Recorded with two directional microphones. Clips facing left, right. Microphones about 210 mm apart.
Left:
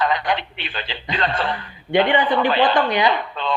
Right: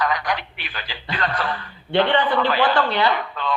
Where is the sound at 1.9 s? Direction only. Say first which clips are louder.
Left 1 dB; 15° left (ahead or behind).